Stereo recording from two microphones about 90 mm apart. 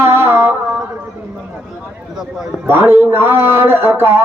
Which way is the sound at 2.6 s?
25° right (ahead or behind).